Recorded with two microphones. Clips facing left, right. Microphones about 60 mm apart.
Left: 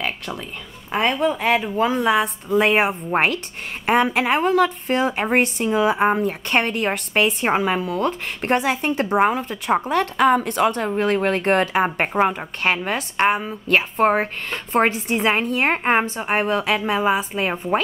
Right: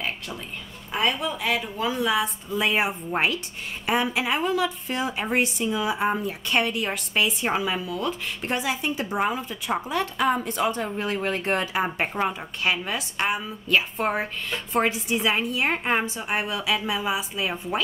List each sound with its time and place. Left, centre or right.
0.9 s a woman's voice: left